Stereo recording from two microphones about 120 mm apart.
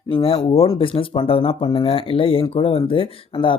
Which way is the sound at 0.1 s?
50° left (ahead or behind).